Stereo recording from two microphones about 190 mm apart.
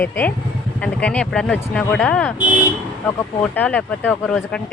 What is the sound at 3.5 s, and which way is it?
Speech, 10° left (ahead or behind).